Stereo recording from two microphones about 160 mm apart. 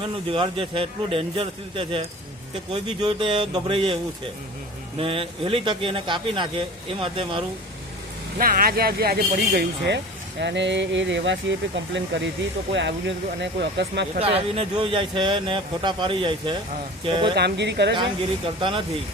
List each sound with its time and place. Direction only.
0.0 s speech: 30° right (ahead or behind)
4.9 s speech: 35° right (ahead or behind)
8.4 s speech: 60° right (ahead or behind); by 14.1 s 90° right
14.2 s speech: 40° right (ahead or behind)
17.3 s speech: 90° right
17.9 s speech: 30° right (ahead or behind)